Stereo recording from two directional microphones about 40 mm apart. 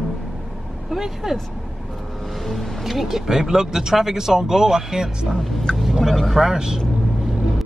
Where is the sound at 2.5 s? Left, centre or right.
Centre.